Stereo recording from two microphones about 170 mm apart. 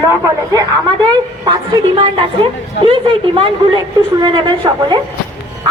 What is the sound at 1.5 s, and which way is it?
A woman's voice, 30° right (ahead or behind).